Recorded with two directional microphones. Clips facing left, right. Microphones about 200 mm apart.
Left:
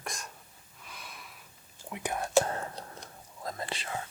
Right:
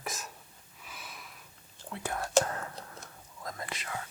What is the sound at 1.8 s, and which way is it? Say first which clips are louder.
Speech: left 2 dB; 15° left (ahead or behind).